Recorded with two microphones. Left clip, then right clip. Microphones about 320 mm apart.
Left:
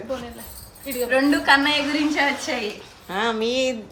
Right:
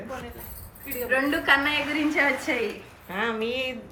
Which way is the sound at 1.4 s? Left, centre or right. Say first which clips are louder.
Left 4 dB; left.